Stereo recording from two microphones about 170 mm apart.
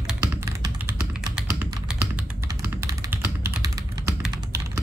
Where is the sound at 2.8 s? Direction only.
15° right (ahead or behind).